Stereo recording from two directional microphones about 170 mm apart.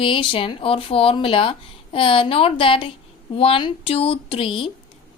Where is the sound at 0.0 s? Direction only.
30° left (ahead or behind).